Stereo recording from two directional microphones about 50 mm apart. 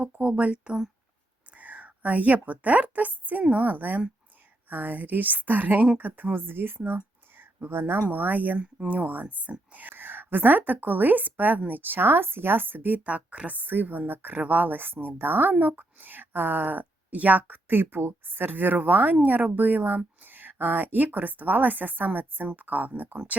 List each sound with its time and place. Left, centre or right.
0.0 s a woman's voice: right
8.0 s speech: right
8.5 s speech: right
17.7 s speech: right